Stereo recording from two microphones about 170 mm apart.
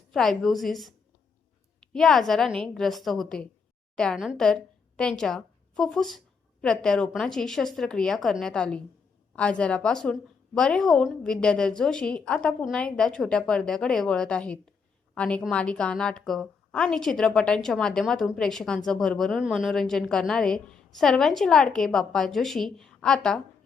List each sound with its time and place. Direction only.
0.1 s a woman's voice: centre (ahead or behind)